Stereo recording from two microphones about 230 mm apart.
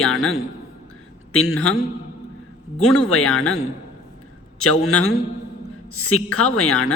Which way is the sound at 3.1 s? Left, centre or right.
Left.